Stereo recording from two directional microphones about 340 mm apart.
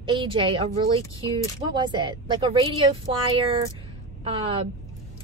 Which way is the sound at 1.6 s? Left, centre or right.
Centre.